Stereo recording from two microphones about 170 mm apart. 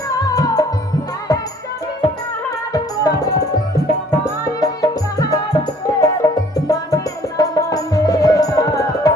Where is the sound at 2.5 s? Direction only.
20° left (ahead or behind).